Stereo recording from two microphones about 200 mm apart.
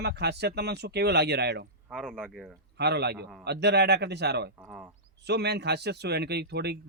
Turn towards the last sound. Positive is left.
turn(degrees=-55)  # may be behind; listen again after turning